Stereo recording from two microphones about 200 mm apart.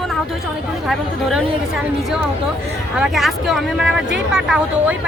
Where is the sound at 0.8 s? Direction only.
Centre (ahead or behind).